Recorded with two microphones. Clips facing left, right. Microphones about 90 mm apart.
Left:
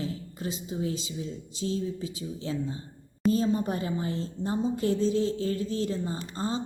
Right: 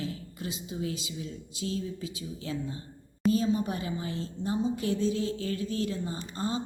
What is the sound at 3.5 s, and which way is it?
A woman's voice, 40° left (ahead or behind).